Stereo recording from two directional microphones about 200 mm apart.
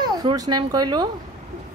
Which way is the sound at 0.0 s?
20° right (ahead or behind).